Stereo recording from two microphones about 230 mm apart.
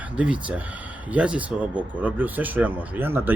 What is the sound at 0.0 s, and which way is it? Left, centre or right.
Speech, centre.